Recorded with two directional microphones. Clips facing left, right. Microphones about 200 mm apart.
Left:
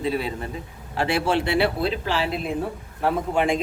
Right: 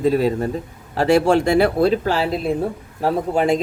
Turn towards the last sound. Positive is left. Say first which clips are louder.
# right 4 dB
turn(degrees=-40)  # may be behind; listen again after turning